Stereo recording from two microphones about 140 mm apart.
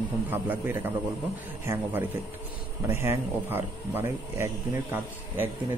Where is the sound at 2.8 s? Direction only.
20° right (ahead or behind).